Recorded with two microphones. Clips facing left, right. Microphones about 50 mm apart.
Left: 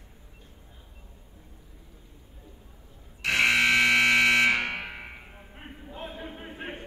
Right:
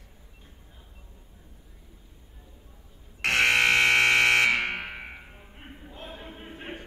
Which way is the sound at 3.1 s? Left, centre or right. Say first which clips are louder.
Right 1 dB; right.